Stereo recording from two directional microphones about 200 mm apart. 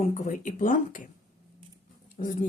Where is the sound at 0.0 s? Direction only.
35° left (ahead or behind).